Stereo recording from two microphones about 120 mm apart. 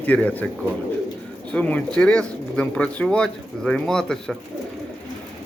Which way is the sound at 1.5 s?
10° left (ahead or behind).